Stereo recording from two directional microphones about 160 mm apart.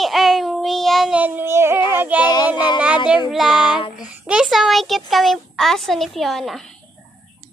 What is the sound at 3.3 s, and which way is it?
Child singing, centre (ahead or behind).